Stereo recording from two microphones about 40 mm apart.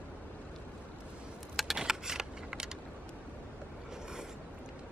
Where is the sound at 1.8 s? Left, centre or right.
Centre.